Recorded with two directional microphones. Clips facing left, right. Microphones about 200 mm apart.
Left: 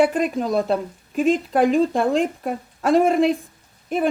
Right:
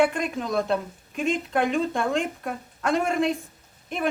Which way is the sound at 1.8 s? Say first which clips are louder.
Left 6 dB; 35° left (ahead or behind).